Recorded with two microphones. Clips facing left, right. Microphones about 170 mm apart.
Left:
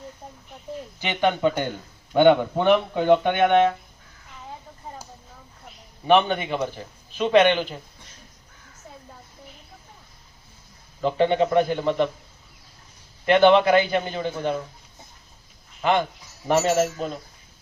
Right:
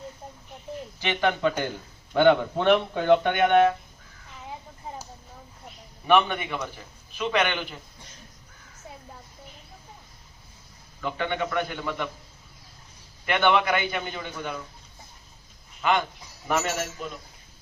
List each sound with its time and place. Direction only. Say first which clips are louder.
1.0 s a man's voice: left 3 dB; 20° left (ahead or behind)
6.1 s a man's voice: left 3 dB; 25° left (ahead or behind)
11.0 s a man's voice: left 8 dB; 30° left (ahead or behind)
13.2 s a man's voice: left 7 dB; 30° left (ahead or behind)
15.8 s a man's voice: left 3 dB; 30° left (ahead or behind)